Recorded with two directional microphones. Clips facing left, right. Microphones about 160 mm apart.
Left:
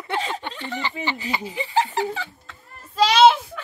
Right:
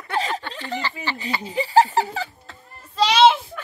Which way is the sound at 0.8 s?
20° left (ahead or behind).